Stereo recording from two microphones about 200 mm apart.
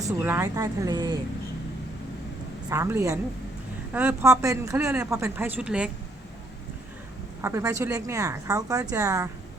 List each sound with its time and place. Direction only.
0.2 s speech: 15° right (ahead or behind)
2.6 s speech: 15° right (ahead or behind)
7.4 s speech: 15° right (ahead or behind)